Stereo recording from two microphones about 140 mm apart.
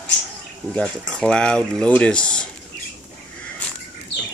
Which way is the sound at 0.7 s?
5° left (ahead or behind).